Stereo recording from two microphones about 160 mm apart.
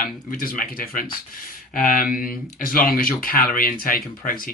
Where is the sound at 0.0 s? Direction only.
60° left (ahead or behind).